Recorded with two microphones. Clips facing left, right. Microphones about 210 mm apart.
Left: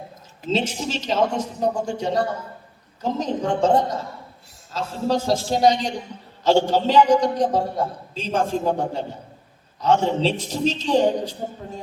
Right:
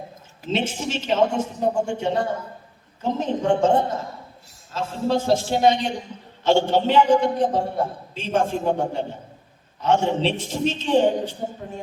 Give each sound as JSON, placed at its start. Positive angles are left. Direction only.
{"t": 0.5, "sound": "a man's voice", "side_deg": 40}